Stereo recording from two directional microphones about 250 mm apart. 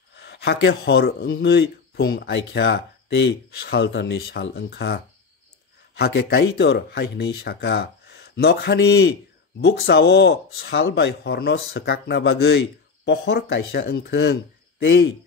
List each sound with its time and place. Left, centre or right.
0.1 s speech: left